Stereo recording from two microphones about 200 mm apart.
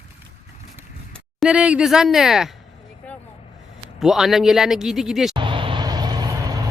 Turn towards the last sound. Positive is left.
turn(degrees=-20)  # may be behind; listen again after turning